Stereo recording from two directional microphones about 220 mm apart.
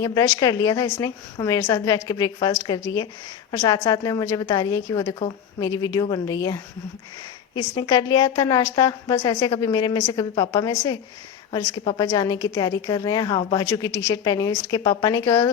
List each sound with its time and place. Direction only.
0.0 s a woman's voice: 15° left (ahead or behind)